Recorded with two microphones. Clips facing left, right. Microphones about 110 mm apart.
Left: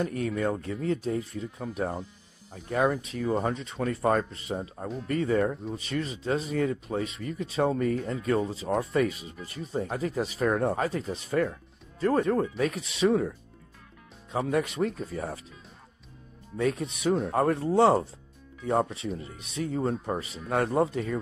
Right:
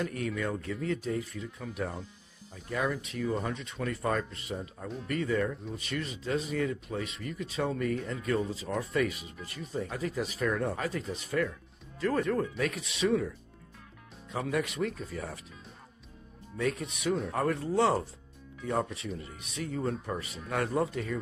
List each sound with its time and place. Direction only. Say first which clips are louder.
0.0 s speech: left 5 dB; 35° left (ahead or behind)
14.3 s speech: left 4 dB; 35° left (ahead or behind)
16.5 s speech: left 4 dB; 30° left (ahead or behind)